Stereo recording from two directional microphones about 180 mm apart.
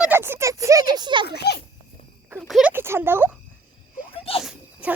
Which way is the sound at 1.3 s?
65° left (ahead or behind).